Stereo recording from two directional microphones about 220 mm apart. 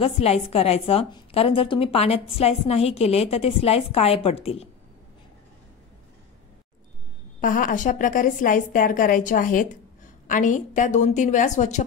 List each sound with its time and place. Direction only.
0.0 s a woman's voice: 25° left (ahead or behind)
7.3 s a woman's voice: 40° left (ahead or behind)